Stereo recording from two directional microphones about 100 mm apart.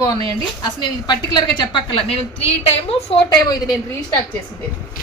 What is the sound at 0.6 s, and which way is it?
A woman's voice, 45° left (ahead or behind).